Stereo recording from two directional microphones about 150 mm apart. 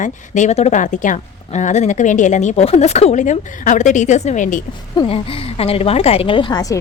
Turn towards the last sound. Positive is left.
turn(degrees=30)  # may be behind; listen again after turning